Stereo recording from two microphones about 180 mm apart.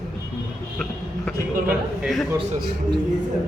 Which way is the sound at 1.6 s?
5° right (ahead or behind).